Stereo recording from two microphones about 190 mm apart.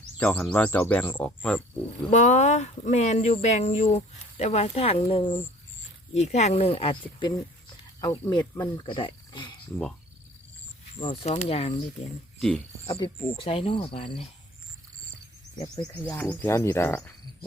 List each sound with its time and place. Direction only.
0.2 s speech: 5° left (ahead or behind)
2.0 s speech: 40° left (ahead or behind)
11.0 s speech: 30° left (ahead or behind)
12.4 s speech: 5° left (ahead or behind)
12.8 s speech: 30° left (ahead or behind)
16.0 s speech: 10° left (ahead or behind)